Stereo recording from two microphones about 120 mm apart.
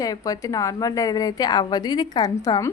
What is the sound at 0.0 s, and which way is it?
A woman's voice, 30° left (ahead or behind).